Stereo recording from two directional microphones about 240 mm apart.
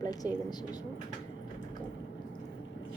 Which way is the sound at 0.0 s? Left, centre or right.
Centre.